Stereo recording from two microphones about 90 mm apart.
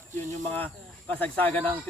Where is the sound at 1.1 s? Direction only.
15° left (ahead or behind).